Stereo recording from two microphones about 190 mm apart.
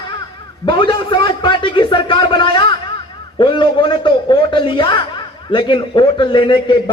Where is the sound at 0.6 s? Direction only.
25° left (ahead or behind).